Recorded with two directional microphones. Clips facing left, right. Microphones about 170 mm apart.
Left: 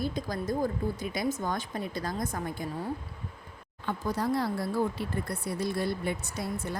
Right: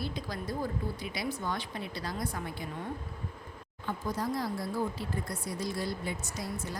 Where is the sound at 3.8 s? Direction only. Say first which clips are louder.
Left 4 dB; 65° left (ahead or behind).